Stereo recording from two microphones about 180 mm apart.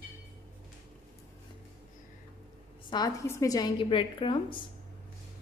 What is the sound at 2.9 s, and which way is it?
A woman's voice, 20° left (ahead or behind).